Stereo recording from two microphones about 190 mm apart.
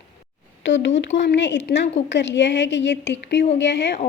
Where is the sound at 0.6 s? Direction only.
70° left (ahead or behind).